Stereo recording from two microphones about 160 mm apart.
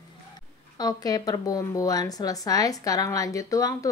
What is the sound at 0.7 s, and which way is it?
Speech, 25° left (ahead or behind).